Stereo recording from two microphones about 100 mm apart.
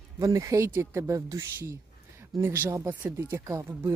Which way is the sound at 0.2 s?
35° right (ahead or behind).